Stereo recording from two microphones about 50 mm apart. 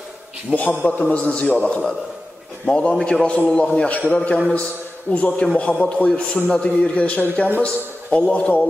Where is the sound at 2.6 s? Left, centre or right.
Centre.